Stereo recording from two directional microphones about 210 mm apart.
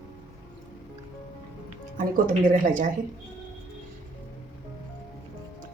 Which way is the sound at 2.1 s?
40° right (ahead or behind).